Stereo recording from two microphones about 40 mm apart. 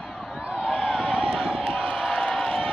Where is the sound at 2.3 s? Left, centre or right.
Centre.